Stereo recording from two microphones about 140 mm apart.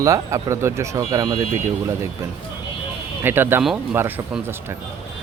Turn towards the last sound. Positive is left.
turn(degrees=-15)  # may be behind; listen again after turning